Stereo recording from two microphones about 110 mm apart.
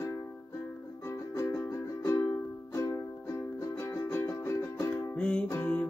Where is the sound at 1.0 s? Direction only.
25° left (ahead or behind).